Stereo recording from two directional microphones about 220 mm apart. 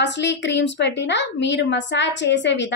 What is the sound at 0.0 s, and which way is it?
A woman's voice, 55° left (ahead or behind).